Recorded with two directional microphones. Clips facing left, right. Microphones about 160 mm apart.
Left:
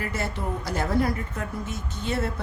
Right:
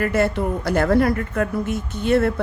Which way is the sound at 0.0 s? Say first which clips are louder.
Right 10 dB; 65° right (ahead or behind).